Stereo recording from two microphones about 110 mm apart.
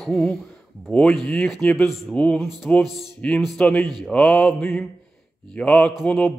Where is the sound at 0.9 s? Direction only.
5° left (ahead or behind).